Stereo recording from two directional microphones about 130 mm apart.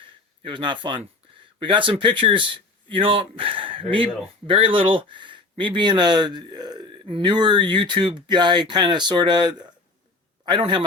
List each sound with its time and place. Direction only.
0.4 s a man's voice: 40° right (ahead or behind)